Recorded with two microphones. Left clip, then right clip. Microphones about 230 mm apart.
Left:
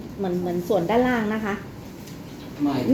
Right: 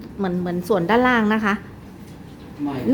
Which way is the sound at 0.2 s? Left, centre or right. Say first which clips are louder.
Right 1 dB; right.